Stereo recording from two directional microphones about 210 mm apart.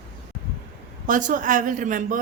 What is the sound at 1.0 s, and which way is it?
A woman's voice, 40° right (ahead or behind).